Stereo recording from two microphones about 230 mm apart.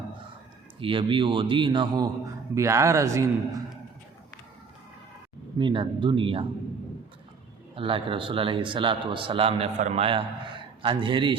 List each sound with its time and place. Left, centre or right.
0.8 s a man's voice: right
5.5 s a man's voice: right
7.8 s a man's voice: right